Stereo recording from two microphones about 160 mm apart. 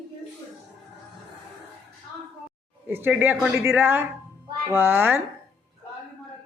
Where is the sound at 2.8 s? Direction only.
10° right (ahead or behind).